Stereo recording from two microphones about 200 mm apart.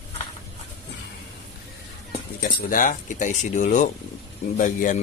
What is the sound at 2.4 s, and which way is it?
Speech, 40° left (ahead or behind).